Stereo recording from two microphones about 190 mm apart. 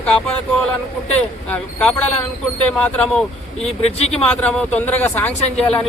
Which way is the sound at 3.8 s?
35° left (ahead or behind).